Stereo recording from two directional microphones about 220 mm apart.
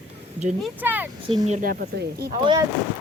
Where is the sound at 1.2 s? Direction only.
30° right (ahead or behind); by 2.3 s 45° right (ahead or behind).